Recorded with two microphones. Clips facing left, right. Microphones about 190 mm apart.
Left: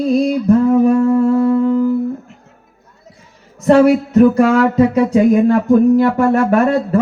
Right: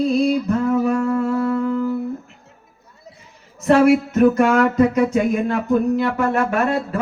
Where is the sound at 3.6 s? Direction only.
35° left (ahead or behind).